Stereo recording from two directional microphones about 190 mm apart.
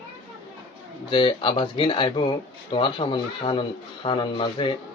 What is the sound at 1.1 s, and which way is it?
Speech, 25° left (ahead or behind).